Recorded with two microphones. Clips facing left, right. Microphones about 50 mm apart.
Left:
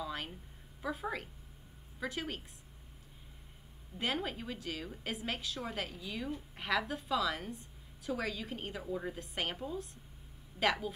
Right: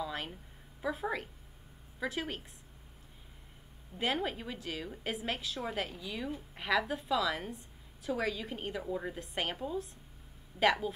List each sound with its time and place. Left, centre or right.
0.0 s a sound: centre
0.8 s a woman's voice: centre
4.0 s a woman's voice: centre